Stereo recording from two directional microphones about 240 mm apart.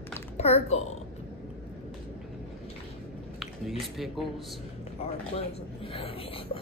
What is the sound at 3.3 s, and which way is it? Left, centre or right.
Speech, centre.